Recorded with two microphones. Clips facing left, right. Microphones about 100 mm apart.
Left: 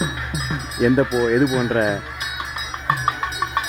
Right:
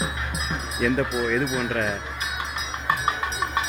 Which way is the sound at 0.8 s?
35° left (ahead or behind).